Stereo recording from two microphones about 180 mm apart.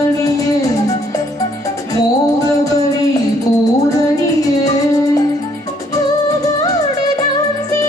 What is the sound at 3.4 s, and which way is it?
Music, 20° left (ahead or behind).